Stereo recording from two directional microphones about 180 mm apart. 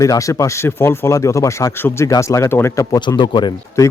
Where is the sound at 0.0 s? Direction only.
20° left (ahead or behind).